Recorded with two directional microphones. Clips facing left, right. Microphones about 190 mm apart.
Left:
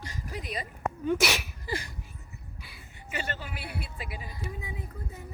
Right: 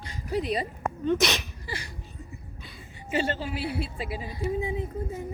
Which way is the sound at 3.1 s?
25° right (ahead or behind).